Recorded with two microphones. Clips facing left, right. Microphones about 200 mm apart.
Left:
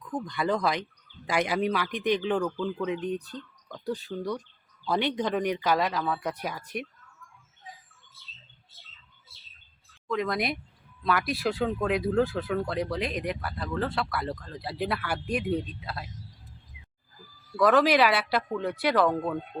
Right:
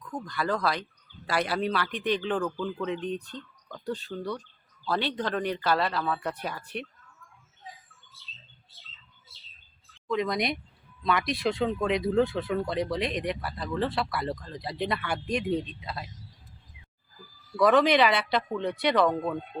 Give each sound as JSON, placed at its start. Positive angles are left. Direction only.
{"t": 0.1, "sound": "speech", "side_deg": 20}
{"t": 10.1, "sound": "speech", "side_deg": 0}
{"t": 17.6, "sound": "speech", "side_deg": 0}